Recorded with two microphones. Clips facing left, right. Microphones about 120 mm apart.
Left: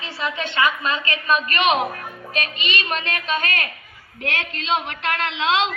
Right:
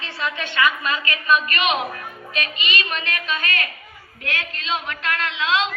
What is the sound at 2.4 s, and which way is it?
Music, 40° left (ahead or behind).